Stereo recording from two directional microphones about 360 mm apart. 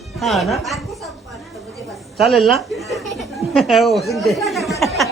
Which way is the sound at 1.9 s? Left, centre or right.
Centre.